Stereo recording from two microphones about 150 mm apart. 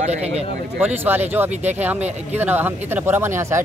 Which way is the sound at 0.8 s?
15° right (ahead or behind).